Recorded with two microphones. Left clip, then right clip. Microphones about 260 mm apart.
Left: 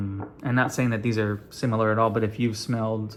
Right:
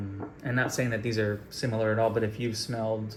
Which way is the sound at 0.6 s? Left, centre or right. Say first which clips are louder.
Left 4 dB; centre.